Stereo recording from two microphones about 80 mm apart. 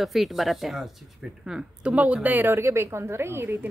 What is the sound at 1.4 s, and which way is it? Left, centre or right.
A woman's voice, centre.